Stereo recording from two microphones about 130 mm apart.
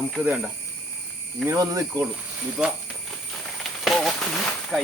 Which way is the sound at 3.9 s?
Centre (ahead or behind).